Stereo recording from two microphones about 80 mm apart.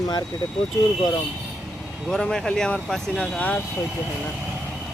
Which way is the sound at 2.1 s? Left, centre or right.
Centre.